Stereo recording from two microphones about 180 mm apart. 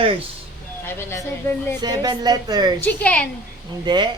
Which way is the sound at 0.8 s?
15° left (ahead or behind).